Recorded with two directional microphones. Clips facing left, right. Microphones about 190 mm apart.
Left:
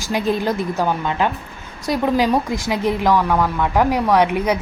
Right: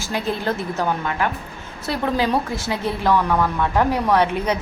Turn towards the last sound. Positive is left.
turn(degrees=10)  # may be behind; listen again after turning